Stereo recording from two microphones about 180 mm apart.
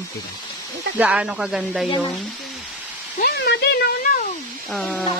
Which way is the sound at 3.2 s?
60° left (ahead or behind).